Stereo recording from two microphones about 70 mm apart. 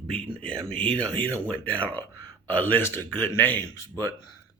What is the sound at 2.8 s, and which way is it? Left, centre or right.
A man's voice, left.